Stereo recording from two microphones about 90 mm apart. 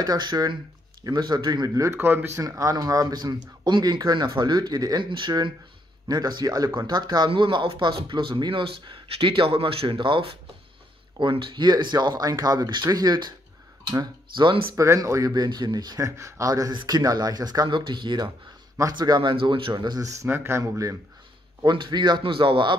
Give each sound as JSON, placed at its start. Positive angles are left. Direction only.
{"t": 0.0, "sound": "speech", "side_deg": -50}
{"t": 1.8, "sound": "speech", "side_deg": -30}
{"t": 2.4, "sound": "speech", "side_deg": -40}
{"t": 7.2, "sound": "a man's voice", "side_deg": -70}
{"t": 12.3, "sound": "speech", "side_deg": -45}
{"t": 14.3, "sound": "a man's voice", "side_deg": -60}
{"t": 14.8, "sound": "speech", "side_deg": -35}
{"t": 15.3, "sound": "speech", "side_deg": -50}
{"t": 16.2, "sound": "speech", "side_deg": -35}
{"t": 17.6, "sound": "a man's voice", "side_deg": -60}
{"t": 19.7, "sound": "speech", "side_deg": -50}
{"t": 20.1, "sound": "speech", "side_deg": -30}
{"t": 21.6, "sound": "a man's voice", "side_deg": -55}